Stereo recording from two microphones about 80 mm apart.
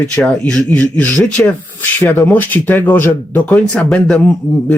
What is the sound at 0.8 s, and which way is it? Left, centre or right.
Speech, centre.